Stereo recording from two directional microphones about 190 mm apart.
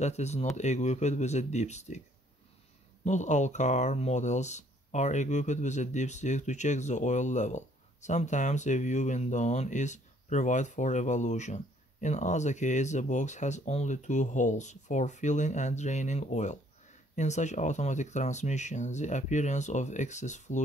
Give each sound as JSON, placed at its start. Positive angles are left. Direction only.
{"t": 0.0, "sound": "speech", "side_deg": 35}
{"t": 3.1, "sound": "speech", "side_deg": 40}